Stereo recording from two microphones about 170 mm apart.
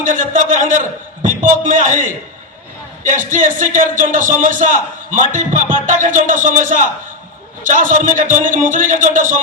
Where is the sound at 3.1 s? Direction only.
50° right (ahead or behind).